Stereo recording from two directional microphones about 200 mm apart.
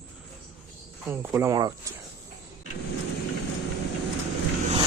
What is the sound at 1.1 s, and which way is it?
Speech, 15° right (ahead or behind).